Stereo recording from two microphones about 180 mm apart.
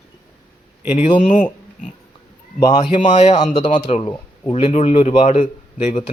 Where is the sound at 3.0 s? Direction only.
40° left (ahead or behind).